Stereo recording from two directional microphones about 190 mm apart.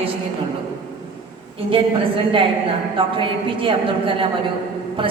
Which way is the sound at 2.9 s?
25° right (ahead or behind).